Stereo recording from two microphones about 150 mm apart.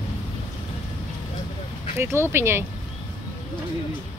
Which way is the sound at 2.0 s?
15° right (ahead or behind).